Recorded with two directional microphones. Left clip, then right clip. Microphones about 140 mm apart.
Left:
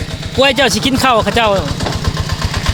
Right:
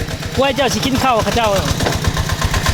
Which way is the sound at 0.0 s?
90° right.